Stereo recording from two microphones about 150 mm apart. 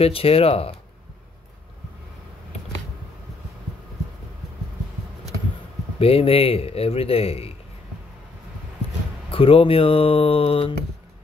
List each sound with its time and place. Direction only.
0.0 s a man's voice: 40° left (ahead or behind)
5.9 s a man's voice: 40° left (ahead or behind)
9.3 s a man's voice: 40° left (ahead or behind)